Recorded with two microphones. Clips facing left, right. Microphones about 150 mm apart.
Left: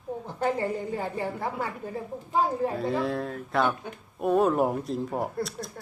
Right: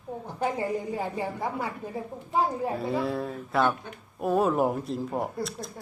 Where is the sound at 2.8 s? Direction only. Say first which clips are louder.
Left 1 dB; centre (ahead or behind).